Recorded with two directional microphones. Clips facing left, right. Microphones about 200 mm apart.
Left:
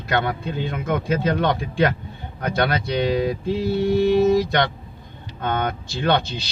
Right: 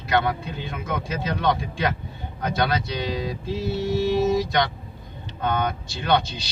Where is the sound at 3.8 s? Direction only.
55° left (ahead or behind).